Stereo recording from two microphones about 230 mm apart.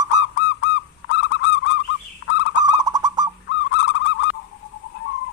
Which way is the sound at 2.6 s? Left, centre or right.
Centre.